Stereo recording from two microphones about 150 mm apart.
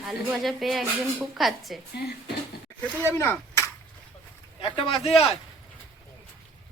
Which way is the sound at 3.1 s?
15° left (ahead or behind).